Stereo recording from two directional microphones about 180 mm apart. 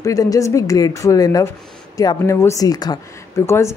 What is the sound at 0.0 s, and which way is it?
Speech, 20° left (ahead or behind).